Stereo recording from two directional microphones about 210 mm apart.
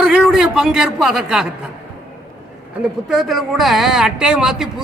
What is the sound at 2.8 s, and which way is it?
Speech, centre (ahead or behind).